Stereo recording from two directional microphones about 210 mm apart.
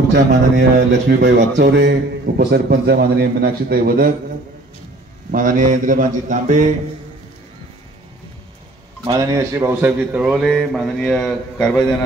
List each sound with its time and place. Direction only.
0.1 s speech: 55° right (ahead or behind)
5.3 s speech: 40° right (ahead or behind)
9.0 s a man's voice: 15° right (ahead or behind); by 11.7 s 5° left (ahead or behind)